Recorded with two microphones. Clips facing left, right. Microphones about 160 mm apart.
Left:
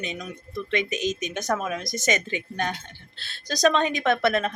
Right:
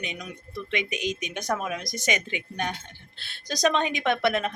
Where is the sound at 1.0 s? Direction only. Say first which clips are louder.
Left 3 dB; 45° left (ahead or behind).